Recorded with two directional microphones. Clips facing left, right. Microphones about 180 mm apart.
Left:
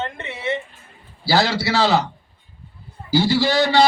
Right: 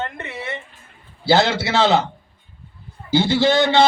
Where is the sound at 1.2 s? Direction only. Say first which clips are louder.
Right 2 dB; 20° right (ahead or behind).